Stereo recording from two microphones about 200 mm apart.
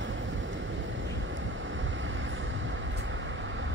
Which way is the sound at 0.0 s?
70° right (ahead or behind).